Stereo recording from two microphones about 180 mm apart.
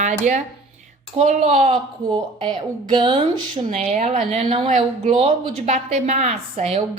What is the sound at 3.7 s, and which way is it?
A woman's voice, 40° right (ahead or behind).